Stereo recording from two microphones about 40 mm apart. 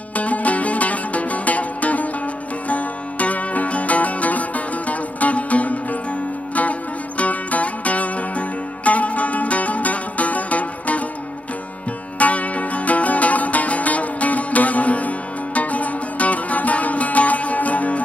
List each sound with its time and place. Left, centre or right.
0.2 s music: left
12.2 s music: left